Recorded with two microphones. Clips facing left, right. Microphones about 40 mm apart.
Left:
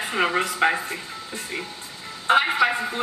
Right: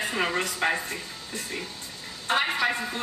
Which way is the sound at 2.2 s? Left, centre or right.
Centre.